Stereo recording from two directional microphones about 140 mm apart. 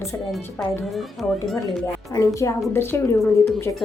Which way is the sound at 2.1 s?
25° left (ahead or behind).